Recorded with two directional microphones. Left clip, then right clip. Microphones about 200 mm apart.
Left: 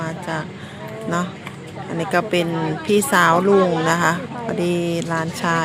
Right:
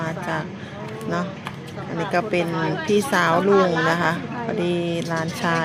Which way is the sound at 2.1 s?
15° left (ahead or behind).